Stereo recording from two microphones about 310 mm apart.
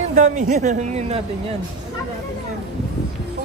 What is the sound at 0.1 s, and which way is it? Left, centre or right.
A man's voice, right.